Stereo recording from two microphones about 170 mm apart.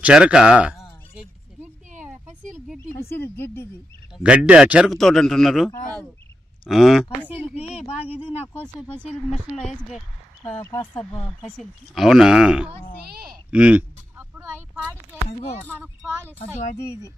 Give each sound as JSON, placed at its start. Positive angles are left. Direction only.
{"t": 0.0, "sound": "a man's voice", "side_deg": -5}
{"t": 2.9, "sound": "speech", "side_deg": 65}
{"t": 3.2, "sound": "speech", "side_deg": 15}
{"t": 4.2, "sound": "a man's voice", "side_deg": -5}
{"t": 7.9, "sound": "speech", "side_deg": 35}
{"t": 8.5, "sound": "speech", "side_deg": 5}
{"t": 10.4, "sound": "speech", "side_deg": 15}
{"t": 11.4, "sound": "a man's voice", "side_deg": 0}
{"t": 13.5, "sound": "a sound", "side_deg": -5}
{"t": 15.2, "sound": "speech", "side_deg": 35}
{"t": 15.6, "sound": "speech", "side_deg": 10}